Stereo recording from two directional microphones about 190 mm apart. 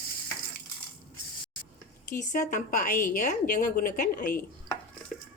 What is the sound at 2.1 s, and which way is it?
Speech, 45° left (ahead or behind).